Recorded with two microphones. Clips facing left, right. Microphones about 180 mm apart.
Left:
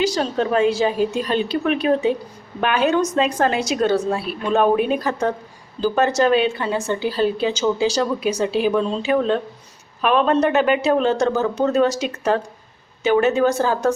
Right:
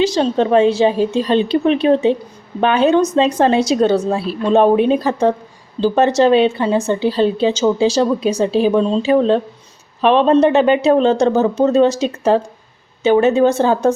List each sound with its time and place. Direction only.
0.0 s a woman's voice: 25° right (ahead or behind)